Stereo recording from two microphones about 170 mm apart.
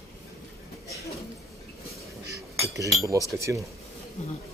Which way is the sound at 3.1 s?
20° right (ahead or behind).